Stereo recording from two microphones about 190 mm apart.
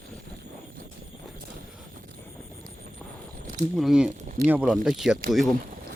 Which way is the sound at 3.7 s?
Centre (ahead or behind).